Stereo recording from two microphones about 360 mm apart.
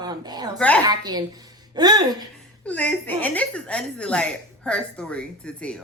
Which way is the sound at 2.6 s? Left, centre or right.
Centre.